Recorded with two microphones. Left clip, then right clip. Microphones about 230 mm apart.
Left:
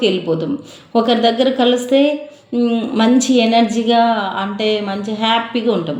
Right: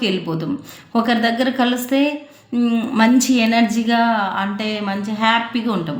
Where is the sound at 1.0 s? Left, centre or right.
Right.